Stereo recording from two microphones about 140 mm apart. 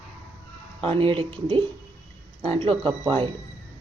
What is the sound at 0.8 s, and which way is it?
Speech, 40° right (ahead or behind).